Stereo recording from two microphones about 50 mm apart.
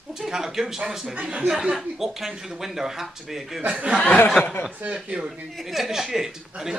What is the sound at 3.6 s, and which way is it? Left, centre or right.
Speech, right.